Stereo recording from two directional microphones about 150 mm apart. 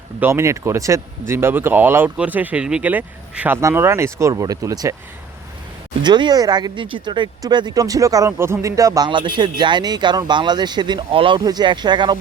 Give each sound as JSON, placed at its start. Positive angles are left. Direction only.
{"t": 0.2, "sound": "speech", "side_deg": -15}
{"t": 6.0, "sound": "speech", "side_deg": -30}